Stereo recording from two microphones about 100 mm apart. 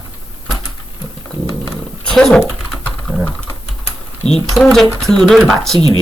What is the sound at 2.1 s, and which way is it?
Speech, 5° left (ahead or behind).